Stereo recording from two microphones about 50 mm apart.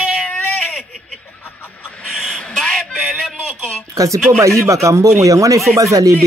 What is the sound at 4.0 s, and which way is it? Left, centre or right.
Speech, right.